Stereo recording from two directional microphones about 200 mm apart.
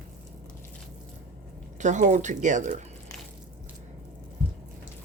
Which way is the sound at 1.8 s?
35° right (ahead or behind).